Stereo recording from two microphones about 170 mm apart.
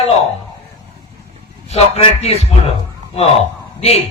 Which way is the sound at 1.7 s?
35° left (ahead or behind).